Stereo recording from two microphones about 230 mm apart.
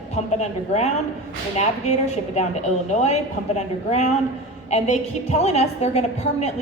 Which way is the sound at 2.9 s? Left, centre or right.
Left.